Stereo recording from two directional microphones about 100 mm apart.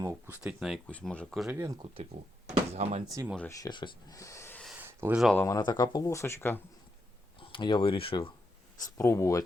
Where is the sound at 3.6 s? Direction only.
50° left (ahead or behind).